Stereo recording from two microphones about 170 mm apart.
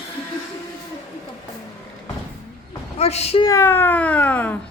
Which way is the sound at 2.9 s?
40° left (ahead or behind).